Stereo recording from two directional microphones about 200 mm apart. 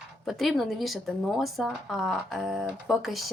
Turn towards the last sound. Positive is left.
turn(degrees=0)  # may be behind; listen again after turning